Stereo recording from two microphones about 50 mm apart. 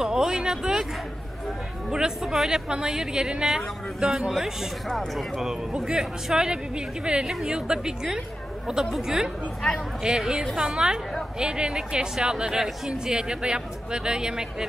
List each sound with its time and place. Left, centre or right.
0.0 s a sound: centre
1.9 s speech: centre
4.3 s speech: centre
5.7 s speech: centre